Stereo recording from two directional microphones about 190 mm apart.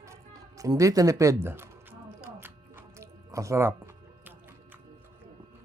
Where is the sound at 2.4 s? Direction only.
15° right (ahead or behind).